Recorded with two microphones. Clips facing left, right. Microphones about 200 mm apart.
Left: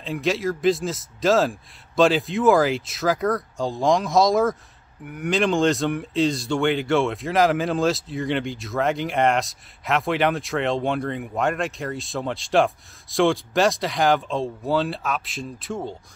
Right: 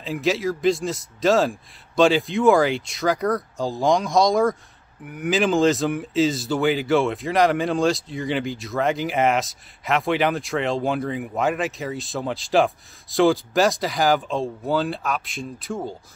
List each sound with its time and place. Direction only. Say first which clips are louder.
0.0 s speech: right 1 dB; centre (ahead or behind)